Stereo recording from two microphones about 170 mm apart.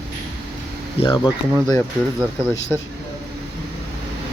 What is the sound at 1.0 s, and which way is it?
Speech, 30° left (ahead or behind).